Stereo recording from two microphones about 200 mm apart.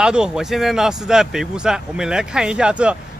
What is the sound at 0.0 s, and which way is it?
Speech, 5° right (ahead or behind).